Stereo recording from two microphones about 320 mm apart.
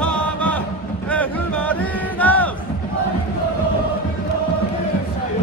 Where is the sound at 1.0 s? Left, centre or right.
Centre.